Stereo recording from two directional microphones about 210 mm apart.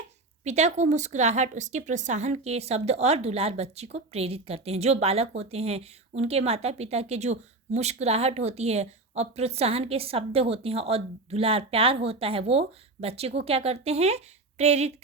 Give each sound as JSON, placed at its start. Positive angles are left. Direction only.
{"t": 0.4, "sound": "a woman's voice", "side_deg": -30}